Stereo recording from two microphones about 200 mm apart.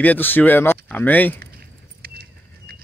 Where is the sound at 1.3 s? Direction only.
50° right (ahead or behind).